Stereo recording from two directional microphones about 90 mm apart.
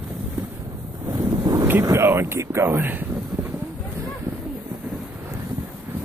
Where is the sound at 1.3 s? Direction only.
50° right (ahead or behind).